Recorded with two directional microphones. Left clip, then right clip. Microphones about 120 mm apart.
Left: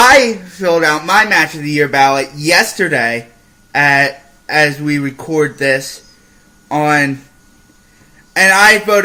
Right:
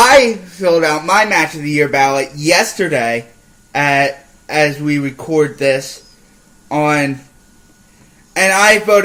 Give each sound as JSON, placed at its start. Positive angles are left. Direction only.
{"t": 0.2, "sound": "speech", "side_deg": 20}
{"t": 8.3, "sound": "speech", "side_deg": 15}